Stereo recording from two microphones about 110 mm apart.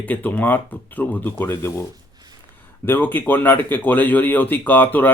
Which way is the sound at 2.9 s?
15° left (ahead or behind).